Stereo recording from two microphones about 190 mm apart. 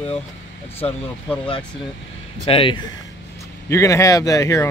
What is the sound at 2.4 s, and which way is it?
Speech, 30° left (ahead or behind).